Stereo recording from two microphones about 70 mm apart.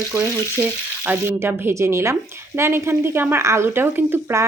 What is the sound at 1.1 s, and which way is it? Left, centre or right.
Speech, right.